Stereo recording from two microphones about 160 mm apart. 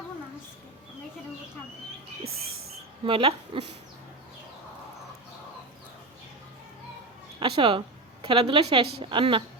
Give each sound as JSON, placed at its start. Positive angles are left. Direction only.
{"t": 3.0, "sound": "speech", "side_deg": -35}
{"t": 7.3, "sound": "speech", "side_deg": -35}